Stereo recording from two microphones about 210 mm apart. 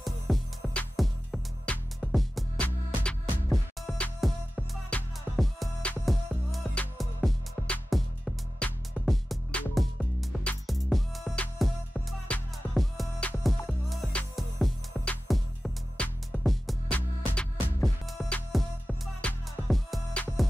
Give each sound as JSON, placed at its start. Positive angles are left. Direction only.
{"t": 0.0, "sound": "music", "side_deg": 0}